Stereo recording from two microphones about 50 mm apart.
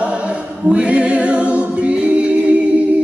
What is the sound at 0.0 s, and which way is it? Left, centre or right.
Choir, right.